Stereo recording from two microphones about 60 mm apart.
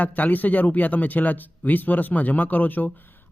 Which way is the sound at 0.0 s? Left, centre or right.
Left.